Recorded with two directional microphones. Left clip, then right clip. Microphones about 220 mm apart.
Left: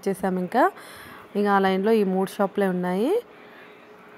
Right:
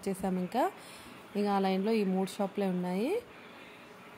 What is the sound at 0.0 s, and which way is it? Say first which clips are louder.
A woman's voice: left 9 dB; 25° left (ahead or behind).